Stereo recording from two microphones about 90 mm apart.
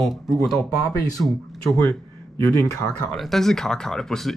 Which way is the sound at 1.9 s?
25° left (ahead or behind).